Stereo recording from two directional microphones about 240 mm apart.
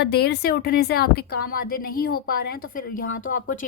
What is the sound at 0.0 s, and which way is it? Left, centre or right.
Speech, left.